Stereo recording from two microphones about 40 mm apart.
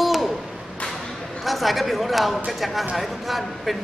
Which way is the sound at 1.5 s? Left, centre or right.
Centre.